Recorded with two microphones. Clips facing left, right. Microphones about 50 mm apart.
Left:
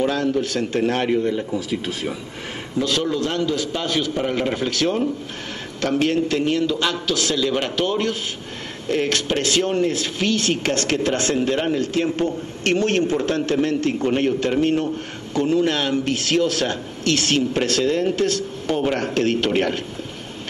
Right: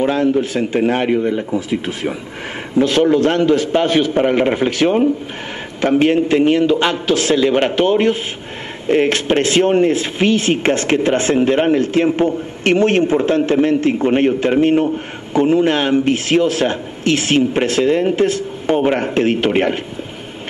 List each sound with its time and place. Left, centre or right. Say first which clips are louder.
0.0 s a man's voice: right 5 dB; right